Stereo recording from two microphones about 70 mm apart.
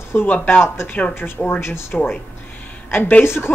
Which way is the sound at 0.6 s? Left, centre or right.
Left.